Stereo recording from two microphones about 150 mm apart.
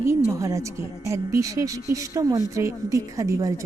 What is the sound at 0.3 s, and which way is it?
A woman's voice, 20° right (ahead or behind).